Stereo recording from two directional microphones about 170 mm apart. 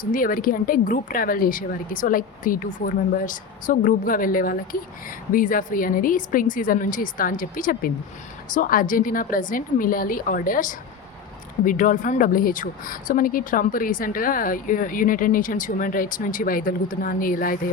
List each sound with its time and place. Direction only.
0.0 s a woman's voice: 55° left (ahead or behind)